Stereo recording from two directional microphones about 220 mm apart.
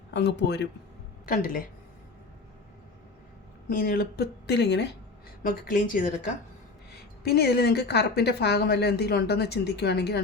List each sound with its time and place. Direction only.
0.1 s a woman's voice: 50° left (ahead or behind)
1.2 s a woman's voice: 40° left (ahead or behind)
3.7 s a woman's voice: 40° left (ahead or behind)
5.4 s a woman's voice: 40° left (ahead or behind)